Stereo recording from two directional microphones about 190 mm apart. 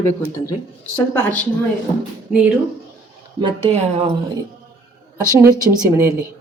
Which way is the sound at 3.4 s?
35° right (ahead or behind).